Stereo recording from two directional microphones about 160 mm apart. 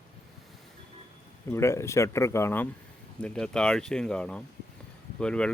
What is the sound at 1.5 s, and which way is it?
Speech, 15° left (ahead or behind).